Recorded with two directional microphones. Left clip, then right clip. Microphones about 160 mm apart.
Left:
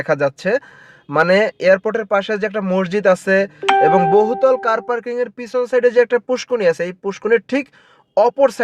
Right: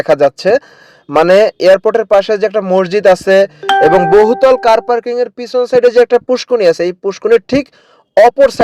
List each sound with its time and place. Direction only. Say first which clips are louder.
0.0 s speech: right 8 dB; 40° right (ahead or behind)